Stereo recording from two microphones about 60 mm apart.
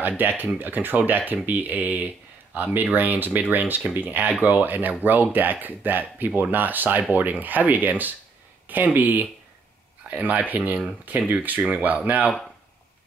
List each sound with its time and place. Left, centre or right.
0.2 s speech: right